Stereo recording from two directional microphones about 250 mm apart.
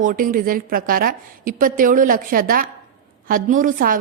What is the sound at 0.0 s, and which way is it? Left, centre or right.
A woman's voice, right.